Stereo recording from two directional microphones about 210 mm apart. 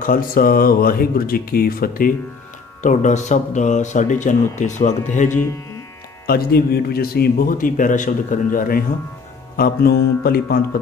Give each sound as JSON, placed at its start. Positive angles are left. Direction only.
{"t": 0.0, "sound": "a man's voice", "side_deg": 45}
{"t": 6.2, "sound": "a man's voice", "side_deg": 50}